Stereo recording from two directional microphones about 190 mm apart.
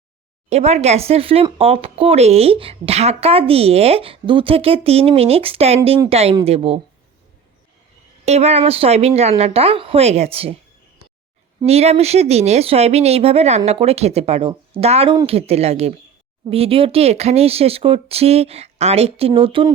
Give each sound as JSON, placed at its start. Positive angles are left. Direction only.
{"t": 0.5, "sound": "speech", "side_deg": -35}
{"t": 8.2, "sound": "speech", "side_deg": -35}
{"t": 11.6, "sound": "speech", "side_deg": -35}